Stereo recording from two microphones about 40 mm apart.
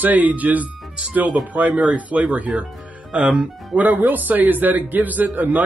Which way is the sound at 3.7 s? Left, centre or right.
Right.